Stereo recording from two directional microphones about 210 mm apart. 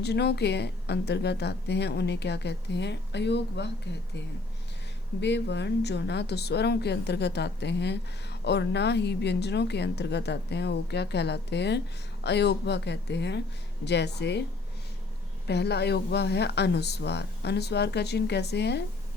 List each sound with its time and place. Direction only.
0.0 s speech: 50° left (ahead or behind)
5.2 s speech: 55° left (ahead or behind)
15.4 s speech: 50° left (ahead or behind)